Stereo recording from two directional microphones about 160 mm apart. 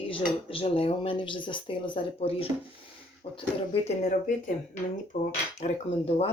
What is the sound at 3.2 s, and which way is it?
Speech, 35° left (ahead or behind).